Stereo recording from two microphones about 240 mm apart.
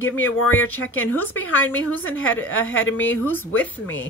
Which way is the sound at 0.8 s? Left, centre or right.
Left.